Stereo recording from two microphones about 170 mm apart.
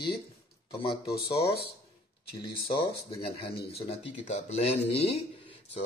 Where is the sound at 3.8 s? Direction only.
35° left (ahead or behind).